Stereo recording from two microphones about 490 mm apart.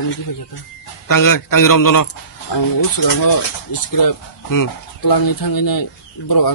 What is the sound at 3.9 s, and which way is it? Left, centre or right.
Speech, left.